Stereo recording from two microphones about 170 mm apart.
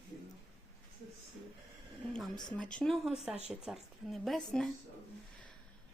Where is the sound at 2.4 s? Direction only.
5° left (ahead or behind).